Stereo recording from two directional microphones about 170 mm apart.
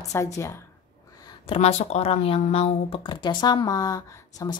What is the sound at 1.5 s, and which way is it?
Speech, 40° left (ahead or behind).